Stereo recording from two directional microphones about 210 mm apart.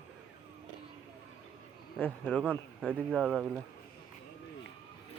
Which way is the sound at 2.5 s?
5° left (ahead or behind).